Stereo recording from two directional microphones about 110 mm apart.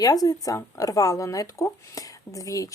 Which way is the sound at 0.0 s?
35° left (ahead or behind).